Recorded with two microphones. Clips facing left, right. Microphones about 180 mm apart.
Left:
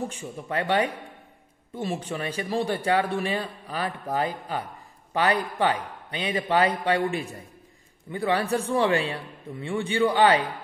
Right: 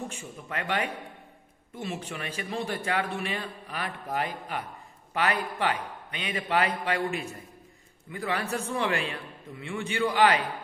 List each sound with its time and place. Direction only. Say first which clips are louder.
0.1 s a man's voice: left 6 dB; 35° left (ahead or behind)
8.1 s a man's voice: left 6 dB; 30° left (ahead or behind)